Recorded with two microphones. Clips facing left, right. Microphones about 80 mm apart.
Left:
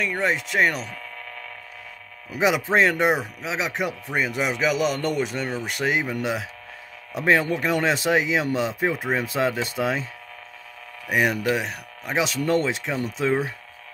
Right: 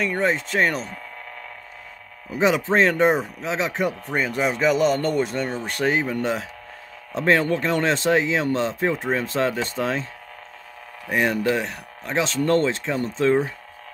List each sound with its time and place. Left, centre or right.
0.0 s speech: centre
2.3 s speech: centre
11.1 s speech: centre